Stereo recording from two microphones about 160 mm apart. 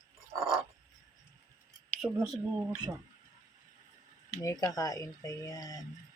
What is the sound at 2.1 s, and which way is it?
Speech, 10° right (ahead or behind).